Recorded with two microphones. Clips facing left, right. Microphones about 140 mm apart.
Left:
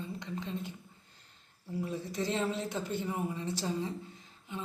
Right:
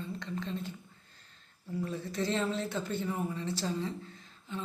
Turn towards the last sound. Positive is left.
turn(degrees=15)  # may be behind; listen again after turning